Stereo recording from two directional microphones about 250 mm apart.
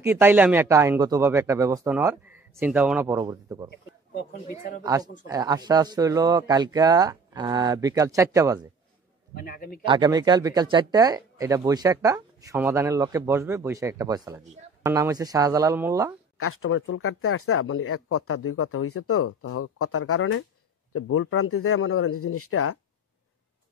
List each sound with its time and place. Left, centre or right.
0.0 s speech: centre
4.1 s speech: left
4.8 s speech: centre
9.3 s speech: left
9.8 s speech: centre
16.3 s speech: left